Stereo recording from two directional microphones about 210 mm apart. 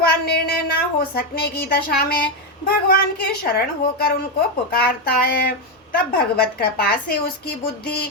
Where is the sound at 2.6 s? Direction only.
45° left (ahead or behind).